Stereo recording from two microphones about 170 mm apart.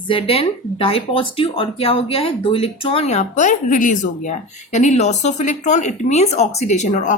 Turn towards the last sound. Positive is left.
turn(degrees=45)  # may be behind; listen again after turning